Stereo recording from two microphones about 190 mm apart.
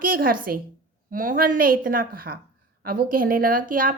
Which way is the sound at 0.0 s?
50° right (ahead or behind).